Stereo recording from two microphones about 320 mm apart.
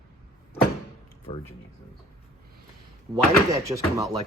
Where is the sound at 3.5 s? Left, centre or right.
Centre.